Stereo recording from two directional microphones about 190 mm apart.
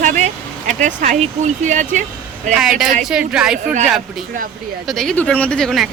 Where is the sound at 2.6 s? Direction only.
Centre (ahead or behind).